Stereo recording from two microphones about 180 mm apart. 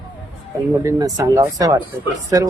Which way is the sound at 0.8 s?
20° right (ahead or behind).